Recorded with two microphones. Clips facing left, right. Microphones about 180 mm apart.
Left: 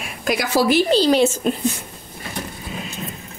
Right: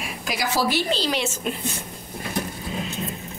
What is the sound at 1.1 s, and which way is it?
Speech, 40° left (ahead or behind).